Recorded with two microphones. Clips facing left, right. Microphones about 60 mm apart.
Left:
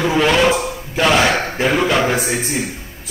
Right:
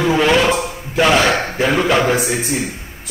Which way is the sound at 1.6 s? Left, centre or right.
Centre.